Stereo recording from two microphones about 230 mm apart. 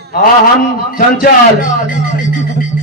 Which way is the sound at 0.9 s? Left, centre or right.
Left.